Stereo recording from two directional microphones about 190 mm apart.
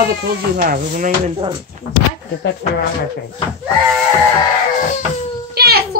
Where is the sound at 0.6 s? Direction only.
45° right (ahead or behind).